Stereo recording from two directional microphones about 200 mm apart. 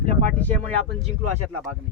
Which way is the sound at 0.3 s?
10° left (ahead or behind).